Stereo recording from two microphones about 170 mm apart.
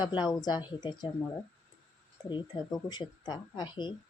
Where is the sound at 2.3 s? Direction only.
25° left (ahead or behind).